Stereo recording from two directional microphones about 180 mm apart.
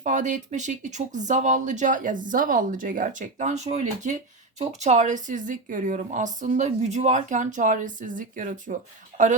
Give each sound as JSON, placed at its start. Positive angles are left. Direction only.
{"t": 0.0, "sound": "speech", "side_deg": -45}